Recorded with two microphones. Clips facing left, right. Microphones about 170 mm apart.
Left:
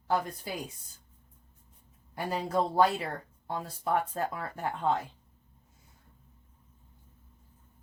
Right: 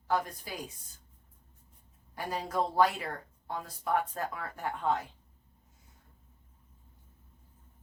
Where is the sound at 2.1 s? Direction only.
25° left (ahead or behind).